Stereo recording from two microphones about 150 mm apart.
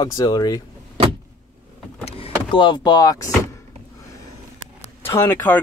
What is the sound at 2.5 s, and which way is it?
Speech, 35° left (ahead or behind).